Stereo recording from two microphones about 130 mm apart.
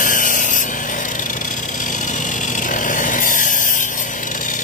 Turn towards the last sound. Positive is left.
turn(degrees=90)